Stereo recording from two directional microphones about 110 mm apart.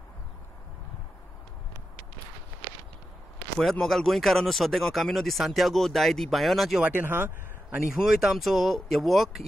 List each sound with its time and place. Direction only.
3.5 s speech: 5° left (ahead or behind)
6.8 s speech: 15° right (ahead or behind)
7.9 s speech: 5° right (ahead or behind)